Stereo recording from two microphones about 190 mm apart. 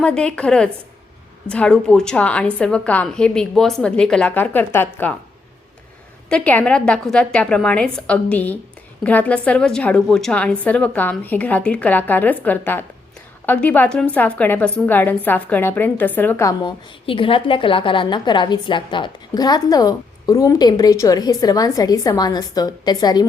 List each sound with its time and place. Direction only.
0.0 s a woman's voice: 5° left (ahead or behind)
6.2 s a woman's voice: 5° left (ahead or behind)